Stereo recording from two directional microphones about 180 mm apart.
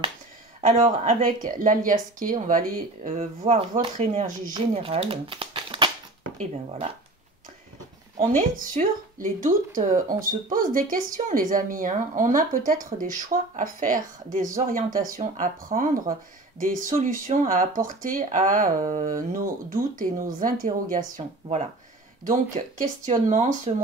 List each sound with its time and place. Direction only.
0.6 s speech: 40° right (ahead or behind)
8.4 s speech: 45° right (ahead or behind)